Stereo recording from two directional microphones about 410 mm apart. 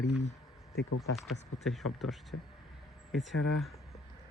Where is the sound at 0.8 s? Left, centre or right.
Left.